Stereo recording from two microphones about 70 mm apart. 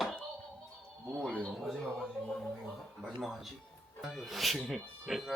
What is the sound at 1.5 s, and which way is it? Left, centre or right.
Speech, centre.